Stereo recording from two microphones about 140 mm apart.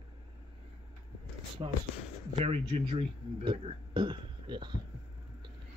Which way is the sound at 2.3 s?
50° right (ahead or behind).